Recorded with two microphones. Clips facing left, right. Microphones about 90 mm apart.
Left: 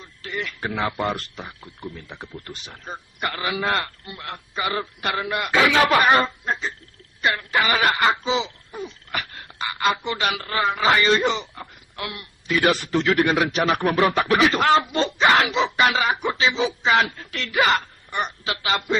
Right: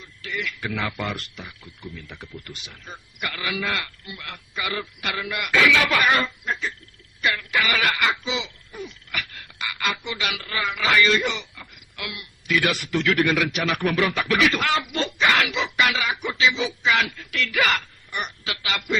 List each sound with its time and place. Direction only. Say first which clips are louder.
0.0 s speech: left 1 dB; 35° left (ahead or behind)